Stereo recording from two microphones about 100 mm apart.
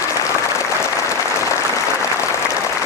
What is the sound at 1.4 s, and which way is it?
Applause, 30° left (ahead or behind).